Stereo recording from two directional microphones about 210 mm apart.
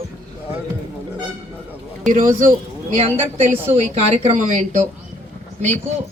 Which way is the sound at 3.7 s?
30° right (ahead or behind).